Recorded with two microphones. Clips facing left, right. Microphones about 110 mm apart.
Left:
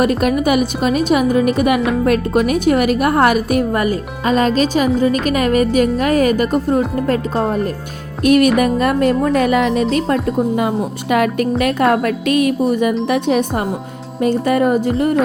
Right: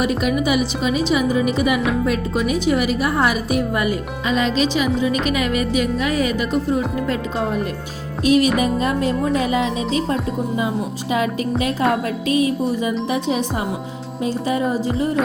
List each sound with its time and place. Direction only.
0.2 s a woman's voice: 50° left (ahead or behind)
8.2 s speech: 60° left (ahead or behind)